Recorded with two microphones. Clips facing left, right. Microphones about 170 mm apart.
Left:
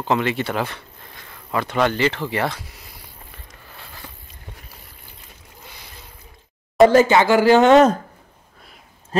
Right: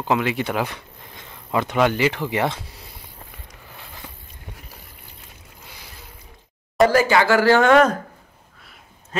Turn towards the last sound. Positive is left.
turn(degrees=25)  # may be behind; listen again after turning